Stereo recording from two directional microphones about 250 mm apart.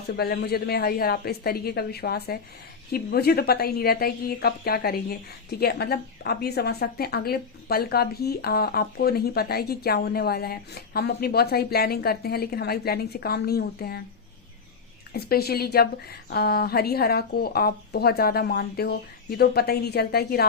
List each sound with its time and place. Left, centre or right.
0.2 s a woman's voice: left
15.1 s a woman's voice: left